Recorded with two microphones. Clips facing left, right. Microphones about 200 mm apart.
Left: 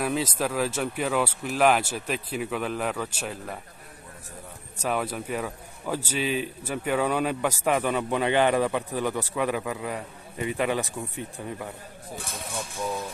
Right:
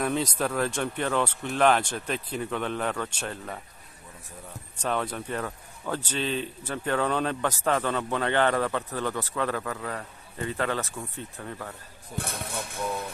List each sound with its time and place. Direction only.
0.0 s speech: 5° left (ahead or behind)
4.7 s a man's voice: 10° left (ahead or behind)
12.2 s speech: 60° right (ahead or behind)